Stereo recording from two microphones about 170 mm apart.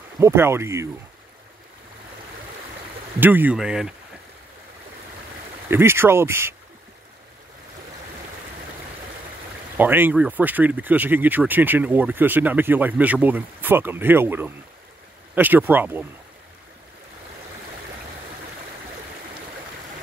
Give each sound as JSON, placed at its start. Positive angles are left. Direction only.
{"t": 0.2, "sound": "speech", "side_deg": -15}
{"t": 3.2, "sound": "speech", "side_deg": -10}
{"t": 5.7, "sound": "speech", "side_deg": -15}
{"t": 9.8, "sound": "speech", "side_deg": -10}